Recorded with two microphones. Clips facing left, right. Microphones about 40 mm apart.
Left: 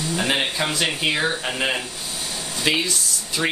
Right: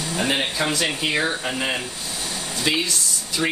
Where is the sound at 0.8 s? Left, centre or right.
Centre.